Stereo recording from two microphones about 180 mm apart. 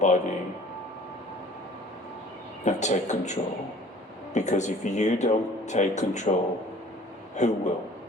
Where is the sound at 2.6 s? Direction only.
40° left (ahead or behind).